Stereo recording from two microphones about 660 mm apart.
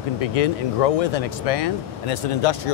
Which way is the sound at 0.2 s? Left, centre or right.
Left.